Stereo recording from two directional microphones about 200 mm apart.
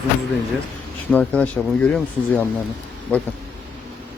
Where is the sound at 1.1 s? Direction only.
5° left (ahead or behind).